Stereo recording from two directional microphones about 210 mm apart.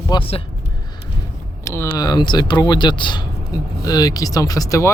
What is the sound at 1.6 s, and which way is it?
Speech, 15° left (ahead or behind).